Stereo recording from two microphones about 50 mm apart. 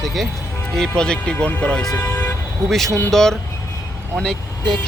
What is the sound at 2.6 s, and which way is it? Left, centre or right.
Speech, centre.